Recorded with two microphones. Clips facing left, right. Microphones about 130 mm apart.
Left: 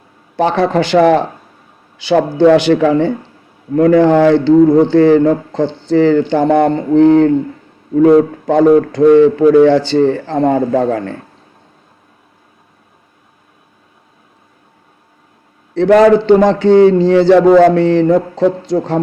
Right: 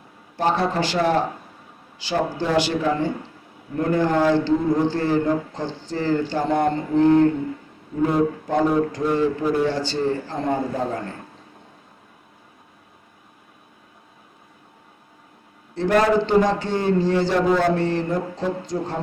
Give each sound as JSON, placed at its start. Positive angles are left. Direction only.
{"t": 0.3, "sound": "speech", "side_deg": 75}
{"t": 15.7, "sound": "speech", "side_deg": 80}